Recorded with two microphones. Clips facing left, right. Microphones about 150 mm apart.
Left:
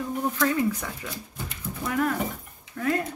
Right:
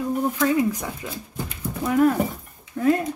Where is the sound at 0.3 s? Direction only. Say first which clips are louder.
Right 2 dB; 15° right (ahead or behind).